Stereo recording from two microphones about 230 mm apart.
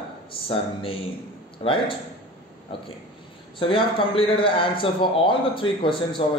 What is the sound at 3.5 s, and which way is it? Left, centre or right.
A man's voice, left.